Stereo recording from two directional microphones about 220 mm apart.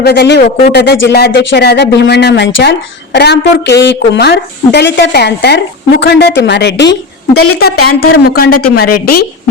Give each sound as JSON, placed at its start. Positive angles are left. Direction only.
{"t": 0.0, "sound": "speech", "side_deg": 50}